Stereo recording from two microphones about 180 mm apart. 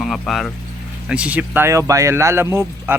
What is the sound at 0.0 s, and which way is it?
Speech, centre (ahead or behind).